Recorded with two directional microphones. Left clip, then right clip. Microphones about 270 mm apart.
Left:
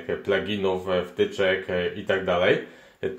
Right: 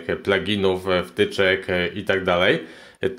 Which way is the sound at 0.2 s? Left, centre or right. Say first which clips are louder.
Right 4 dB; right.